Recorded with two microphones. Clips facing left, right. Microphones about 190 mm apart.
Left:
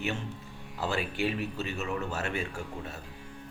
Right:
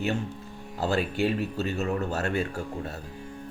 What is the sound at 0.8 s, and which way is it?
Speech, 40° right (ahead or behind).